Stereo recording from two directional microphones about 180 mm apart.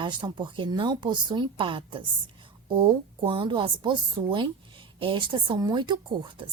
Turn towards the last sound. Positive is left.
turn(degrees=-25)  # may be behind; listen again after turning